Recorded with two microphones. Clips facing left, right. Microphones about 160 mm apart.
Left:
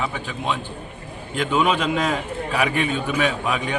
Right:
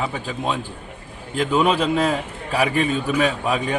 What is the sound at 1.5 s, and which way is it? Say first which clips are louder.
A man's voice: right 2 dB; 35° right (ahead or behind).